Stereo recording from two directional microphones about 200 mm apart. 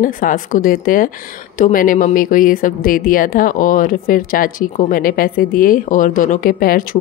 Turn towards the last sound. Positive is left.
turn(degrees=45)  # may be behind; listen again after turning